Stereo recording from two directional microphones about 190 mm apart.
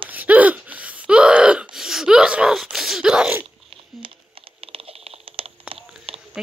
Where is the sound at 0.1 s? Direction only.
10° right (ahead or behind).